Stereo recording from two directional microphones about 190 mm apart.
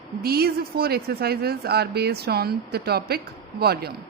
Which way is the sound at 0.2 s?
55° right (ahead or behind).